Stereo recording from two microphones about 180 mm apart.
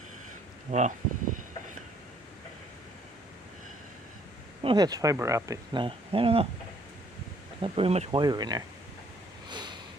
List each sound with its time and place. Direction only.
0.7 s speech: 40° right (ahead or behind)
4.6 s speech: 25° right (ahead or behind)
7.6 s speech: 30° right (ahead or behind)
8.2 s speech: 20° right (ahead or behind)
9.5 s snort: 25° right (ahead or behind)